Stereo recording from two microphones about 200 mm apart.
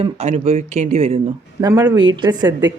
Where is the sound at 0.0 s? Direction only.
30° right (ahead or behind).